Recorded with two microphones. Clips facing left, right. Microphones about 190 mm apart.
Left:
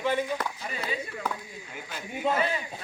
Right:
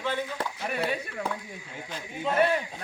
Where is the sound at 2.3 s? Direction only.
60° right (ahead or behind).